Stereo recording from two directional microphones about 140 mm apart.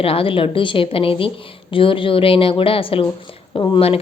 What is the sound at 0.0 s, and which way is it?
A woman's voice, 40° left (ahead or behind).